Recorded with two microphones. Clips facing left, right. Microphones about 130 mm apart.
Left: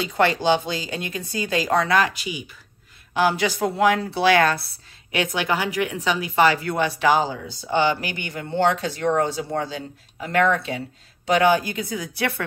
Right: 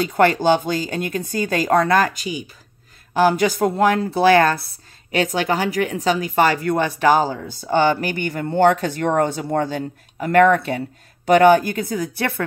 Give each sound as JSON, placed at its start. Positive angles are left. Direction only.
{"t": 0.0, "sound": "speech", "side_deg": -50}